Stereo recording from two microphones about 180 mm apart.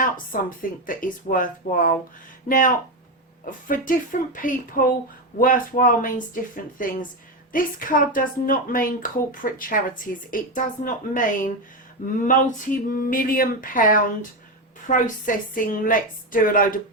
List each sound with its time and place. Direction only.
0.3 s a woman's voice: 50° left (ahead or behind)